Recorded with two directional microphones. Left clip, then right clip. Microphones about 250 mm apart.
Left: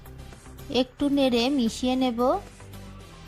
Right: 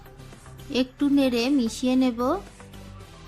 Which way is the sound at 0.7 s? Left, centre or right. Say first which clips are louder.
Right 1 dB; left.